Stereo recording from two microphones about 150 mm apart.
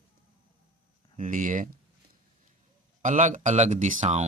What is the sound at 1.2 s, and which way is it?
Speech, 60° right (ahead or behind).